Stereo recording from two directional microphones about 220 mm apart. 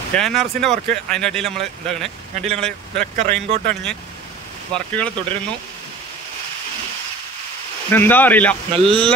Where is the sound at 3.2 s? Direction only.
30° right (ahead or behind).